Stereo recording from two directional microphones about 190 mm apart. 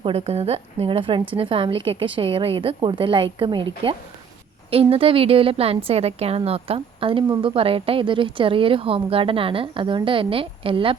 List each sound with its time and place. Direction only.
0.0 s a woman's voice: 30° right (ahead or behind)